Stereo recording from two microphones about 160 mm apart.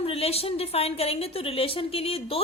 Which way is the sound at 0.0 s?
40° left (ahead or behind).